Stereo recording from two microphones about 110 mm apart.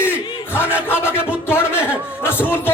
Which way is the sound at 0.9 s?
20° left (ahead or behind).